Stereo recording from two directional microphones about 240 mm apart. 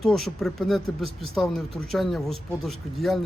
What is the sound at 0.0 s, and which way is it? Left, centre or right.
Speech, centre.